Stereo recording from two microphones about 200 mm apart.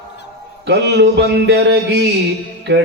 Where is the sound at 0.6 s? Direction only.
60° right (ahead or behind).